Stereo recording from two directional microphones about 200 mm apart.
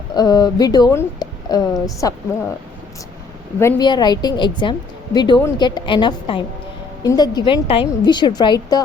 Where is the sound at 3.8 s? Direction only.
20° left (ahead or behind).